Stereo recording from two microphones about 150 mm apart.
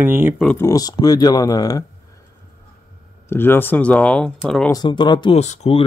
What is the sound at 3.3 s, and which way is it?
Speech, 15° left (ahead or behind).